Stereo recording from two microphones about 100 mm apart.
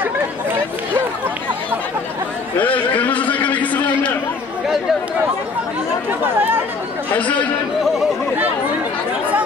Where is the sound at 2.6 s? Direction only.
15° left (ahead or behind).